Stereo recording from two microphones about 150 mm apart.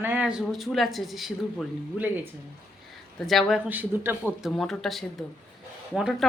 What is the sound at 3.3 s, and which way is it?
Speech, centre (ahead or behind).